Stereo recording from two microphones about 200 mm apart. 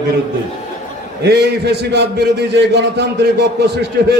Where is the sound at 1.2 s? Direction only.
55° right (ahead or behind).